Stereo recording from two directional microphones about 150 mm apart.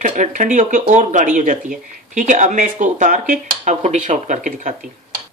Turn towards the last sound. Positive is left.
turn(degrees=-55)  # may be behind; listen again after turning